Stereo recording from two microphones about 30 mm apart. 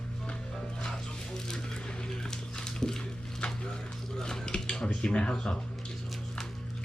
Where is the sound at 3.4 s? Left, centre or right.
Left.